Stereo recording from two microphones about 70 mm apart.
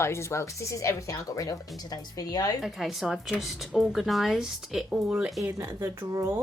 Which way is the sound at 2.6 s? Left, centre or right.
Centre.